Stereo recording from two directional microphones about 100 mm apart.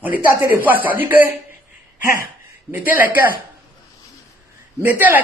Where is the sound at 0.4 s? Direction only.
20° right (ahead or behind).